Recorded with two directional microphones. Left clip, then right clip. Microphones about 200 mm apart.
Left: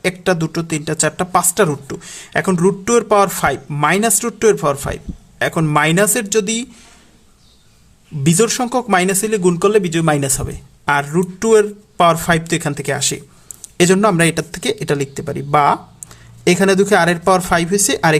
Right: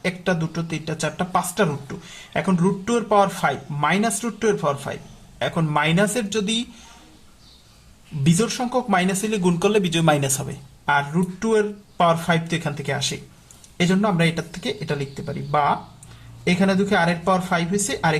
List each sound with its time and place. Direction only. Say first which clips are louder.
0.0 s speech: left 7 dB; 40° left (ahead or behind)
8.2 s speech: left 7 dB; 40° left (ahead or behind)